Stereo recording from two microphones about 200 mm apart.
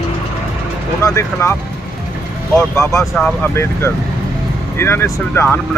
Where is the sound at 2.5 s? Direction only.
15° left (ahead or behind).